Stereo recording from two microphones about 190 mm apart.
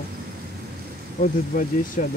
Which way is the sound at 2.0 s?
40° left (ahead or behind).